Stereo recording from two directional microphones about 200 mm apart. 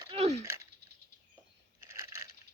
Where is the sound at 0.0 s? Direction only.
30° right (ahead or behind).